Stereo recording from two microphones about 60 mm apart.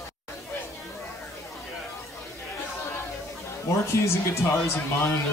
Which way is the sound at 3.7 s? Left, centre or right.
Left.